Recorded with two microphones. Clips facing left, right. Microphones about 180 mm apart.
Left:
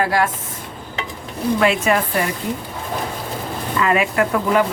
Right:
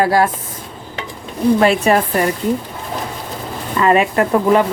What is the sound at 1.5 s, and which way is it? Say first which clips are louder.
Speech: right 2 dB; 35° right (ahead or behind).